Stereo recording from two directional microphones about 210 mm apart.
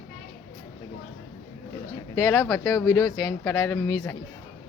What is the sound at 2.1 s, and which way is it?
Speech, 10° left (ahead or behind).